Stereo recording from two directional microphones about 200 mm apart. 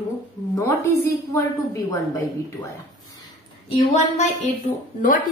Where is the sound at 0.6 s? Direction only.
15° left (ahead or behind).